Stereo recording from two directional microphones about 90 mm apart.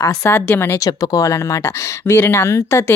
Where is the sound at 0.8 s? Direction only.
40° left (ahead or behind).